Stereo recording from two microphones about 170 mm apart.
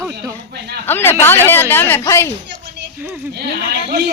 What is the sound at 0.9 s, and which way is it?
A woman's voice, 10° left (ahead or behind).